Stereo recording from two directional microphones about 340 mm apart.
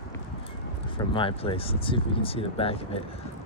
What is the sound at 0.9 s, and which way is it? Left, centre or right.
Speech, centre.